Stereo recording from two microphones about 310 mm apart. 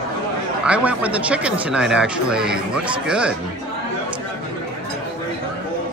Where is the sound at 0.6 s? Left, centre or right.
Centre.